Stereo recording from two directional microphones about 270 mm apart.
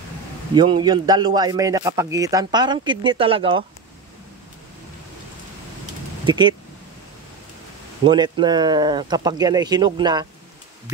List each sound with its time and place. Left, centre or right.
0.6 s a man's voice: centre
6.2 s speech: centre
8.0 s a man's voice: centre